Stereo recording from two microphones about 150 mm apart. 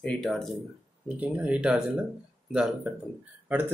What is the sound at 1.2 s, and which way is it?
A man's voice, 10° right (ahead or behind).